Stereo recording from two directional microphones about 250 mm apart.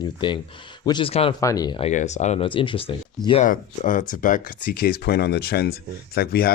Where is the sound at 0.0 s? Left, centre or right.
Centre.